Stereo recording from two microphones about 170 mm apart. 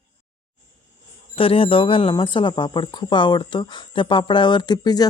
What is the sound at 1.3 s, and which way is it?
Speech, 35° left (ahead or behind).